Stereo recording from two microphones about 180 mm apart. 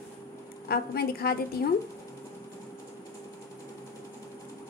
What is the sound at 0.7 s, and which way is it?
Speech, 60° left (ahead or behind).